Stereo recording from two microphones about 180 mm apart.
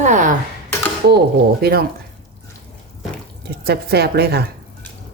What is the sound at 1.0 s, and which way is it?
Speech, 65° right (ahead or behind).